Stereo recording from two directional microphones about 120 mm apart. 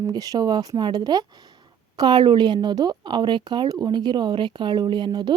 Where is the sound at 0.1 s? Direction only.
35° right (ahead or behind).